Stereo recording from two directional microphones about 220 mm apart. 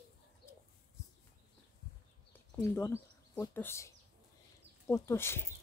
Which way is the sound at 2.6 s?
10° left (ahead or behind).